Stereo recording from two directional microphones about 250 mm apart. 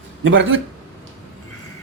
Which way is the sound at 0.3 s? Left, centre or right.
Right.